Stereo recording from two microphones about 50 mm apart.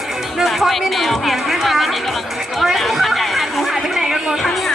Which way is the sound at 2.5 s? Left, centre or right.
Centre.